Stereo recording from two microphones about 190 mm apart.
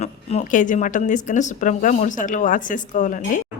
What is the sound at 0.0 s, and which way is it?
A woman's voice, 35° left (ahead or behind).